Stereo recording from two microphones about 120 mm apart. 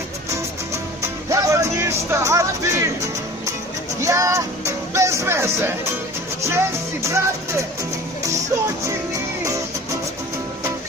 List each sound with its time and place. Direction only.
0.7 s music: 25° right (ahead or behind)